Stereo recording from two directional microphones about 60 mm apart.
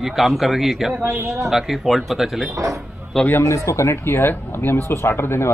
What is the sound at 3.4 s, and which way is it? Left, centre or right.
Speech, left.